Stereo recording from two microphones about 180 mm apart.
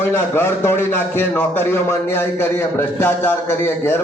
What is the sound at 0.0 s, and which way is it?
A man's voice, 15° left (ahead or behind).